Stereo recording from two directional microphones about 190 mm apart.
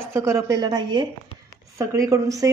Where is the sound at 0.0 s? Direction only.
15° right (ahead or behind).